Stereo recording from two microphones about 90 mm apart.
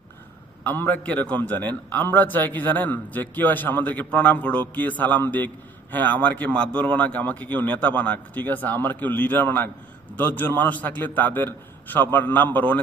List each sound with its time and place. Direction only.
0.6 s a man's voice: 20° left (ahead or behind)